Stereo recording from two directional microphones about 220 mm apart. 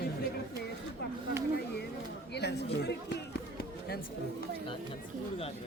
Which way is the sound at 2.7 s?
50° left (ahead or behind).